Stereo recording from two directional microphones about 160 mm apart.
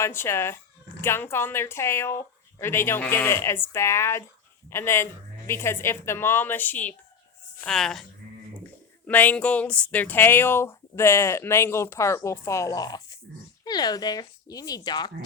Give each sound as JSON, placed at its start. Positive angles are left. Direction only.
{"t": 0.0, "sound": "speech", "side_deg": 15}
{"t": 9.0, "sound": "speech", "side_deg": 10}